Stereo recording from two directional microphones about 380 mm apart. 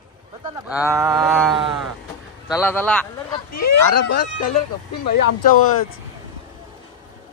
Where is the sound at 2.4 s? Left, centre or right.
Centre.